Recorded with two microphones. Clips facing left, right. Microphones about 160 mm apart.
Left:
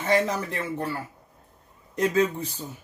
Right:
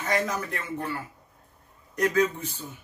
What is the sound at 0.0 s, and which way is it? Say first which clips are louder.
Speech: left 4 dB; 30° left (ahead or behind).